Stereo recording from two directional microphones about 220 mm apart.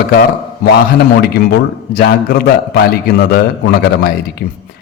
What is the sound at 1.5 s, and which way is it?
A man's voice, 45° left (ahead or behind).